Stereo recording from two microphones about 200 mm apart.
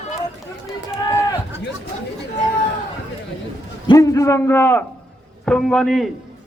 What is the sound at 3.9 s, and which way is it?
A man's voice, 15° left (ahead or behind).